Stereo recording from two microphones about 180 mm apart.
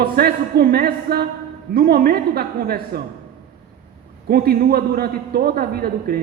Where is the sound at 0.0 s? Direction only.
60° right (ahead or behind).